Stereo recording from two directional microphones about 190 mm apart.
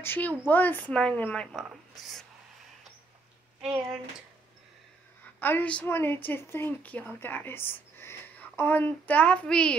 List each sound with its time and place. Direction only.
0.0 s a woman's voice: 10° left (ahead or behind)
5.4 s a woman's voice: 10° left (ahead or behind)